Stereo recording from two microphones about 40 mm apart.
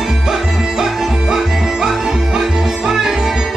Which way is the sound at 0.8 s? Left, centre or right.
Centre.